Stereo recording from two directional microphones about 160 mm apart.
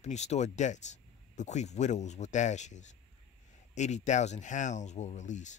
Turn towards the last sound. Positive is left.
turn(degrees=50)  # may be behind; listen again after turning